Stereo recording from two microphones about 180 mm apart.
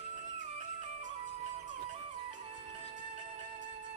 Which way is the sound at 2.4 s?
35° right (ahead or behind).